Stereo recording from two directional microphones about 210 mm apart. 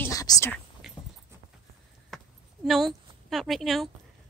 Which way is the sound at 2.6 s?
Centre (ahead or behind).